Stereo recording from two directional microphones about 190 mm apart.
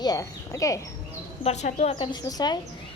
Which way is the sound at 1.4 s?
35° left (ahead or behind).